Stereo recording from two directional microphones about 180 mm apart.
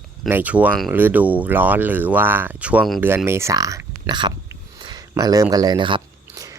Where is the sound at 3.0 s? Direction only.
10° right (ahead or behind).